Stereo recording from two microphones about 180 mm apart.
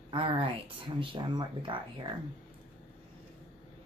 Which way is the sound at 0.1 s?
30° right (ahead or behind).